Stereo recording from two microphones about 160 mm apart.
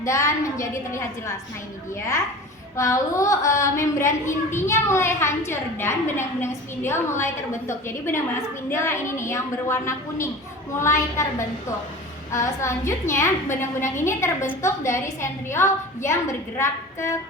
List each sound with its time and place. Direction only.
0.0 s a woman's voice: 20° left (ahead or behind)
2.7 s a woman's voice: 20° left (ahead or behind)
12.3 s a woman's voice: 20° left (ahead or behind)